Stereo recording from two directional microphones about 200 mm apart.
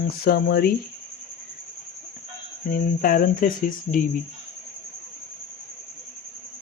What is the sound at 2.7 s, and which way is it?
Speech, 45° left (ahead or behind).